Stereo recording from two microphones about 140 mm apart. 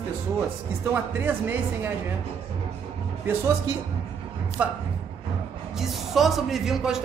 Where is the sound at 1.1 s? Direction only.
15° right (ahead or behind).